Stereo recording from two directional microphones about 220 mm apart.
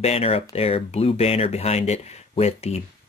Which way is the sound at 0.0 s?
25° left (ahead or behind).